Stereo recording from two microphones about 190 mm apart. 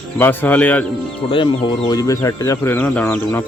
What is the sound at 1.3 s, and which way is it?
Speech, 25° left (ahead or behind).